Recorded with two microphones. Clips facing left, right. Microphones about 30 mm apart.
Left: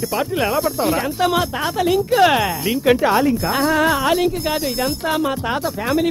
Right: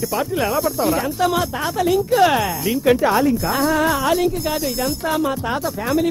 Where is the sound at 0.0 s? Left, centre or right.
Left.